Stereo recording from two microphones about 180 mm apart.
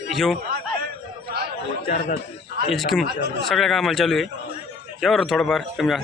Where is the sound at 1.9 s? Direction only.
50° left (ahead or behind).